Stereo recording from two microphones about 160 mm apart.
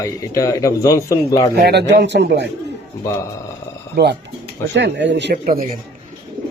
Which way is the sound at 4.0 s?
90° right.